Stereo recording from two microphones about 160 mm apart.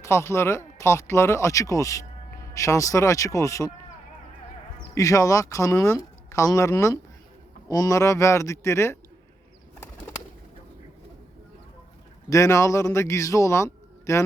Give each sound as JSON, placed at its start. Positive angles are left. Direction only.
{"t": 0.0, "sound": "speech", "side_deg": 15}
{"t": 4.9, "sound": "a man's voice", "side_deg": 20}
{"t": 12.3, "sound": "a man's voice", "side_deg": 20}